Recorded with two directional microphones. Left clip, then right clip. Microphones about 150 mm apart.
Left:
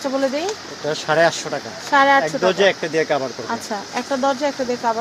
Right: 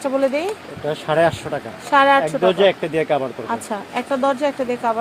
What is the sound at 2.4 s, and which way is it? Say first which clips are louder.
Speech: right 1 dB; 60° right (ahead or behind).